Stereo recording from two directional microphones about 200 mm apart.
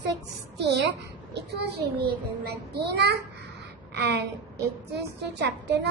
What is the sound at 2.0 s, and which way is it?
Speech, 55° right (ahead or behind).